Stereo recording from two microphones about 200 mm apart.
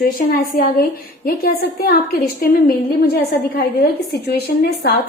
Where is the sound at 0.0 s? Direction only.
45° left (ahead or behind).